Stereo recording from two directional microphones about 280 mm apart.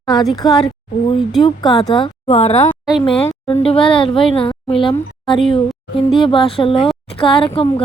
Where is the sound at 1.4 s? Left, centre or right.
Centre.